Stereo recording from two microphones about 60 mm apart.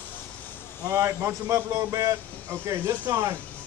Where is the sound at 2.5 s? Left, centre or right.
Right.